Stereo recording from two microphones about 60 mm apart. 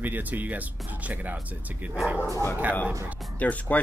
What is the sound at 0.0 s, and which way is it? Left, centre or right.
Speech, right.